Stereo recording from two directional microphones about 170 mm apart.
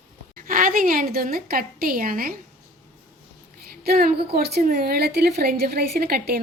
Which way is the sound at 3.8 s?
60° right (ahead or behind).